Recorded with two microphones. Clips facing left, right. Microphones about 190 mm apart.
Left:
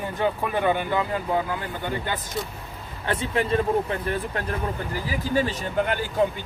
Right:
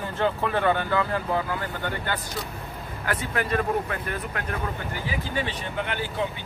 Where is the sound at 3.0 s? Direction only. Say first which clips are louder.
Left 3 dB; 25° left (ahead or behind).